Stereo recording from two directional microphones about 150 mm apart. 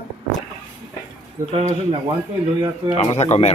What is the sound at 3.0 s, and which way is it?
Speech, 45° left (ahead or behind).